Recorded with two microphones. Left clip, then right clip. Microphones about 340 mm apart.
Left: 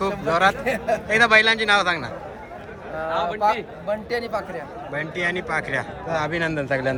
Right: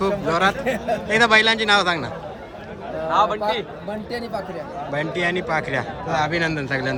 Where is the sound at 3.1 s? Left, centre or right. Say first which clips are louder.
Right 6 dB; centre.